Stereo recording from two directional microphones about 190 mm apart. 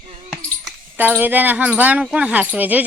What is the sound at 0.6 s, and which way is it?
Speech, 10° right (ahead or behind).